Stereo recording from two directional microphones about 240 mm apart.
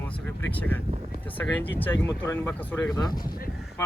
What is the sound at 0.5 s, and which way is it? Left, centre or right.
Speech, centre.